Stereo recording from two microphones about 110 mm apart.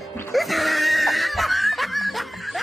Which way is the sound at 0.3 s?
Centre (ahead or behind).